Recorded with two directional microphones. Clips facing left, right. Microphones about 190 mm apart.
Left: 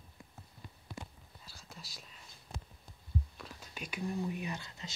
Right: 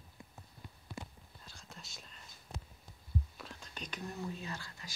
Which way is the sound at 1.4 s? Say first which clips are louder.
Left 1 dB; centre (ahead or behind).